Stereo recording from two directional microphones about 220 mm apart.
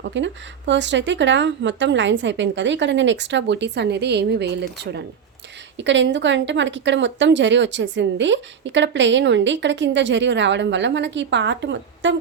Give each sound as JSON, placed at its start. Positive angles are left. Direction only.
{"t": 0.0, "sound": "a woman's voice", "side_deg": -55}